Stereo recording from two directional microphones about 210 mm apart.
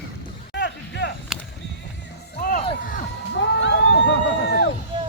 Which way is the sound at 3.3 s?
60° left (ahead or behind).